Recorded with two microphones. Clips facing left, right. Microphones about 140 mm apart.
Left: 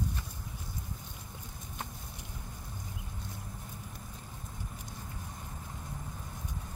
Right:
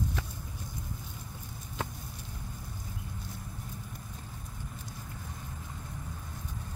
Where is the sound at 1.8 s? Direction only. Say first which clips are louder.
Right 6 dB; 90° right.